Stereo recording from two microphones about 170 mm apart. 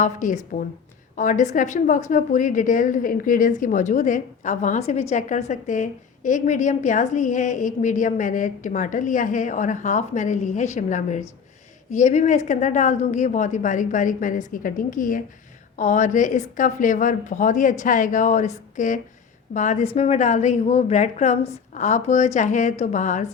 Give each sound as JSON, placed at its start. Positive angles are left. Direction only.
{"t": 0.0, "sound": "a woman's voice", "side_deg": 50}